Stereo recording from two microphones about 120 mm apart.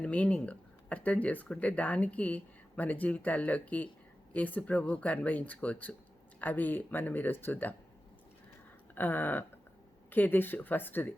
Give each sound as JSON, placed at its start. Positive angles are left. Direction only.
{"t": 0.0, "sound": "speech", "side_deg": 10}
{"t": 9.0, "sound": "speech", "side_deg": 15}